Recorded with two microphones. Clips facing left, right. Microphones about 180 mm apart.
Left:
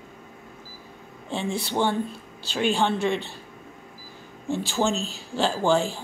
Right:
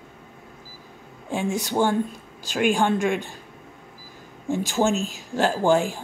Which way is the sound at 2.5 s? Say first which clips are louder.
Right 3 dB; 10° right (ahead or behind).